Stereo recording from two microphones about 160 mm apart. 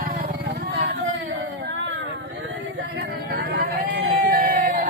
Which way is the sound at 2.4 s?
90° right.